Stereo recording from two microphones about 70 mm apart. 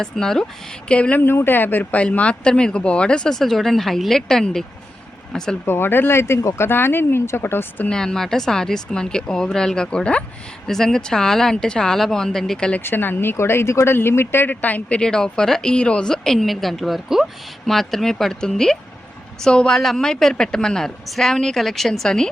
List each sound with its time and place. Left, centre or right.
0.0 s speech: centre
1.2 s speech: left; by 4.6 s centre
5.6 s speech: left
7.9 s speech: centre
12.8 s speech: left
14.5 s speech: left